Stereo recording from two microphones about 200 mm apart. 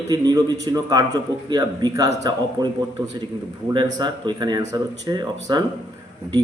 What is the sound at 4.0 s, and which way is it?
A man's voice, 20° right (ahead or behind).